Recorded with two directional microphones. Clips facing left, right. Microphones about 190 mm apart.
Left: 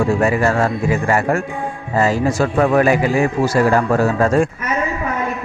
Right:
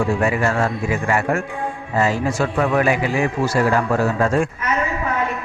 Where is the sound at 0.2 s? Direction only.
40° left (ahead or behind).